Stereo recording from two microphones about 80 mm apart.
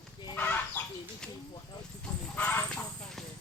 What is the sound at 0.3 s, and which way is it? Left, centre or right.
Fowl, left.